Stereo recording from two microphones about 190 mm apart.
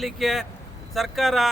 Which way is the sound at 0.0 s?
Centre (ahead or behind).